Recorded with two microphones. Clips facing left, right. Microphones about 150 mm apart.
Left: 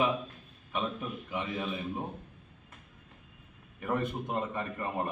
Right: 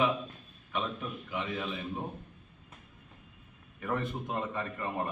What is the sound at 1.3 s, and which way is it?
Speech, 15° left (ahead or behind).